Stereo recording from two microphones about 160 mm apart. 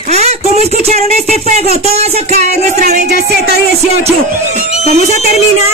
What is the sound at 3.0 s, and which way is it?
Music, 90° right.